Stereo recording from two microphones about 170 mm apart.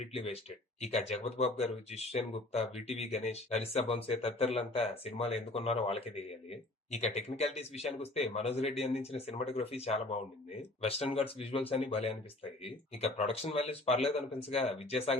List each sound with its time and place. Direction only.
0.1 s speech: 35° left (ahead or behind)